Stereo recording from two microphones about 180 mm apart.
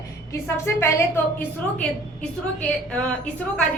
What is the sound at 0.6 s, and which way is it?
A woman's voice, 15° left (ahead or behind).